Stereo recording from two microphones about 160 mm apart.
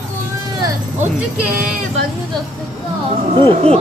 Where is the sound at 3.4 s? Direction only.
30° right (ahead or behind).